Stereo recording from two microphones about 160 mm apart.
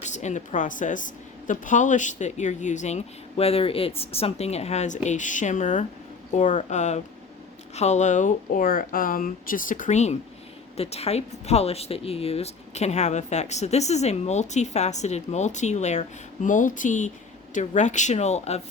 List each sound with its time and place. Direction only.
0.0 s speech: 50° left (ahead or behind)